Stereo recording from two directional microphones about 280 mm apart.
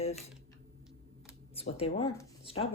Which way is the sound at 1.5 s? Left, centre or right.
Left.